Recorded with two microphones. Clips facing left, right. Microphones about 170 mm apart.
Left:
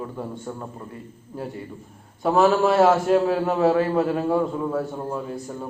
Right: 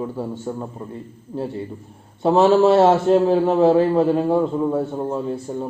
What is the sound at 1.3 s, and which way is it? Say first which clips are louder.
A man's voice: right 6 dB; 25° right (ahead or behind).